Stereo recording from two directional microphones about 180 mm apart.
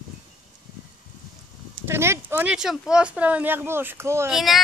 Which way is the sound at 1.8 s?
15° right (ahead or behind).